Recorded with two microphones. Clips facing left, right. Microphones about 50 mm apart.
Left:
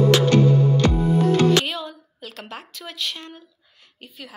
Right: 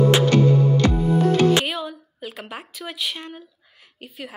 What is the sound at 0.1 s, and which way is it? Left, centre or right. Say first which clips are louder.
Music: even; right.